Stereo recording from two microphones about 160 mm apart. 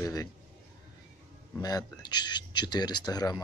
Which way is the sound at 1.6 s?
25° left (ahead or behind).